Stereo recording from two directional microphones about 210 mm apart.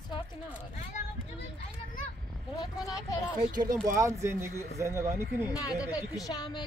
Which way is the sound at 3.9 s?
15° right (ahead or behind).